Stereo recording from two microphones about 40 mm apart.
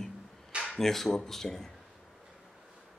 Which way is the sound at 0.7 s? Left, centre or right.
Centre.